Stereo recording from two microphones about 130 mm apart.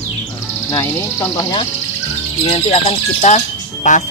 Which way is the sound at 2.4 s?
50° left (ahead or behind).